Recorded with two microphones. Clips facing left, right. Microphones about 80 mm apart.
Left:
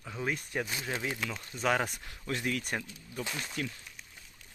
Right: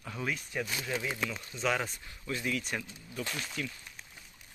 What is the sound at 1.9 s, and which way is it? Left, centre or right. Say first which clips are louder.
Speech: left 1 dB; left.